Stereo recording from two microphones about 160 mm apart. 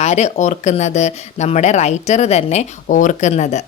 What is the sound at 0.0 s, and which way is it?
Speech, 45° left (ahead or behind).